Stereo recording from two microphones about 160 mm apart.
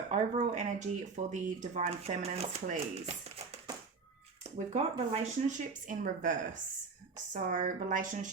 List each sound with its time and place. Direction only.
0.1 s speech: 50° right (ahead or behind)